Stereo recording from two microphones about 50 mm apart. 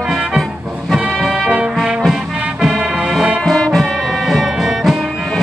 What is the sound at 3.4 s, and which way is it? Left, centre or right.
Music, centre.